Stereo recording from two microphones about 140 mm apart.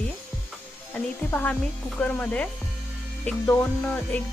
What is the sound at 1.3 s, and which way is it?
Speech, 10° left (ahead or behind).